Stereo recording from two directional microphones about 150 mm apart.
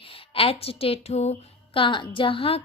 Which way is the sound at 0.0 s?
40° left (ahead or behind).